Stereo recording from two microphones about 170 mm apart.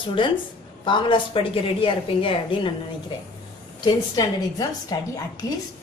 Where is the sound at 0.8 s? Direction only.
30° left (ahead or behind).